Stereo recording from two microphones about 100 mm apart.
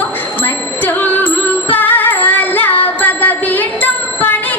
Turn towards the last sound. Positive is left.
turn(degrees=20)  # may be behind; listen again after turning